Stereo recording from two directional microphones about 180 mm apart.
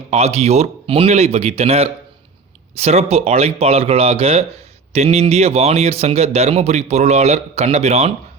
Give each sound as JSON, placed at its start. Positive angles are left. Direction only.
{"t": 0.1, "sound": "speech", "side_deg": -35}